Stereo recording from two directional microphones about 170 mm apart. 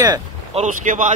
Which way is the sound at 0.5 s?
45° right (ahead or behind).